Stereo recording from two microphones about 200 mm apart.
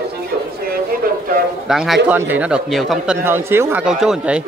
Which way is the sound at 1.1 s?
45° right (ahead or behind).